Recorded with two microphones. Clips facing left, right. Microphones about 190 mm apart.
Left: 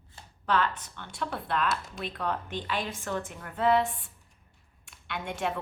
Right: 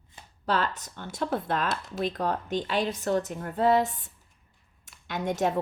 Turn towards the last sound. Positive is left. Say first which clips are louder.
# right 5 dB
turn(degrees=-40)  # may be behind; listen again after turning